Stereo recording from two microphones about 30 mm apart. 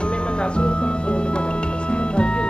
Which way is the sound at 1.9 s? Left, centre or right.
Left.